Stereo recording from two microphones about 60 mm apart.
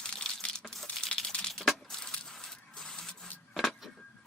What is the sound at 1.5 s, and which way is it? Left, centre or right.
Crushing, centre.